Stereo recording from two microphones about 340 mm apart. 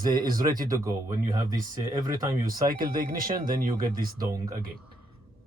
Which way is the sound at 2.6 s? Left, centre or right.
Right.